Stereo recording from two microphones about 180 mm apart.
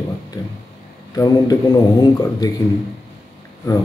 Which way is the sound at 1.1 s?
20° left (ahead or behind).